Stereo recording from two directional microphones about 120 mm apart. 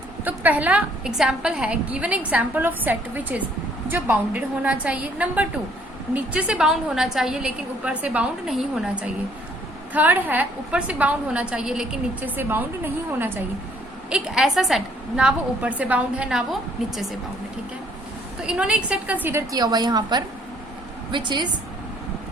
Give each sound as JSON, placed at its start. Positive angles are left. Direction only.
{"t": 0.3, "sound": "a woman's voice", "side_deg": -15}
{"t": 12.4, "sound": "a woman's voice", "side_deg": -15}
{"t": 14.1, "sound": "a woman's voice", "side_deg": -5}
{"t": 18.4, "sound": "a woman's voice", "side_deg": -10}
{"t": 19.5, "sound": "a woman's voice", "side_deg": -35}